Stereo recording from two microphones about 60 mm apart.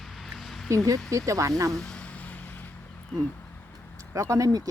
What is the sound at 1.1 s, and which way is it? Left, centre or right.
Speech, right.